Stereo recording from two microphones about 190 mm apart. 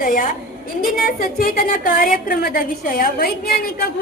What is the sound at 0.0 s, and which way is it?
A woman's voice, 45° left (ahead or behind).